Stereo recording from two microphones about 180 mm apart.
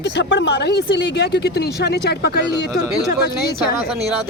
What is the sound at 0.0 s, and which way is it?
Speech, 70° left (ahead or behind).